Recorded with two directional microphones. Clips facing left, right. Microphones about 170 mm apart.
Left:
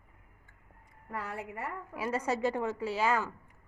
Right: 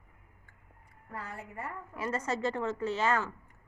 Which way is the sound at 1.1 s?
70° left (ahead or behind).